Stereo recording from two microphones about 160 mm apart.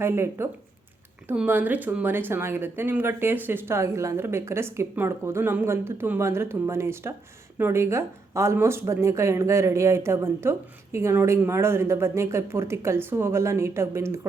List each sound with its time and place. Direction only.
0.0 s speech: 15° right (ahead or behind)